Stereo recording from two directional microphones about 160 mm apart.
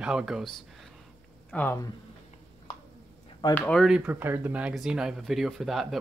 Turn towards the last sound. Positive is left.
turn(degrees=0)  # may be behind; listen again after turning